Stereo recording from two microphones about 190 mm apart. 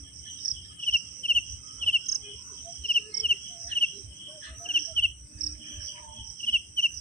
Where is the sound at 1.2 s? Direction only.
45° left (ahead or behind).